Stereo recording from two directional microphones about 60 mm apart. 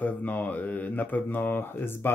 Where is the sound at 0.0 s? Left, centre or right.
Left.